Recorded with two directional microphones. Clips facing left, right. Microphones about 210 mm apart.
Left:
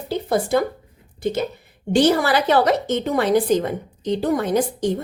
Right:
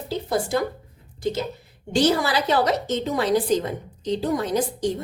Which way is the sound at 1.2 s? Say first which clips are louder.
Left 3 dB; 55° left (ahead or behind).